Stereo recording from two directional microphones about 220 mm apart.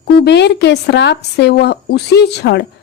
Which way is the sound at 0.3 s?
50° left (ahead or behind).